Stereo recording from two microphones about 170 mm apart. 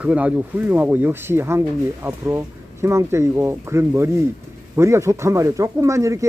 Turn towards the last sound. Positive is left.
turn(degrees=-20)  # may be behind; listen again after turning